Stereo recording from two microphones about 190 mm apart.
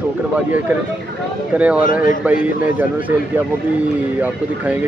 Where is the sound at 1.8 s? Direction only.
45° left (ahead or behind).